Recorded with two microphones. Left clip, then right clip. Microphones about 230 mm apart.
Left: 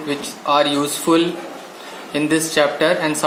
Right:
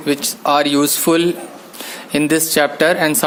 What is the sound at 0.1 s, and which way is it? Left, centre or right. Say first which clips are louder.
Speech: right 3 dB; right.